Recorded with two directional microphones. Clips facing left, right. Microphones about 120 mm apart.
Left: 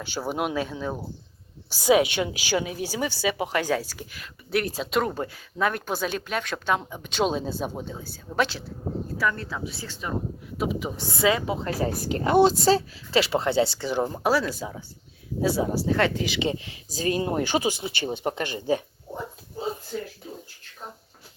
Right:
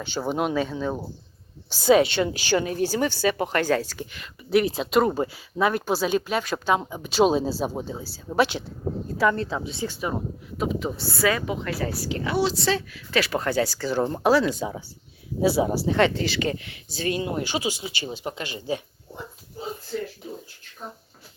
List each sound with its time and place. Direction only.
0.0 s a woman's voice: 10° left (ahead or behind); by 8.6 s 15° right (ahead or behind)
9.1 s a woman's voice: 25° right (ahead or behind)
10.6 s a woman's voice: 5° left (ahead or behind)
14.0 s a woman's voice: 5° left (ahead or behind)
16.5 s speech: 30° left (ahead or behind); by 18.6 s 50° left (ahead or behind)